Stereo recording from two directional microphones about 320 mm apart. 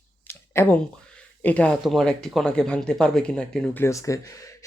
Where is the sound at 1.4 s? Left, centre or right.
Centre.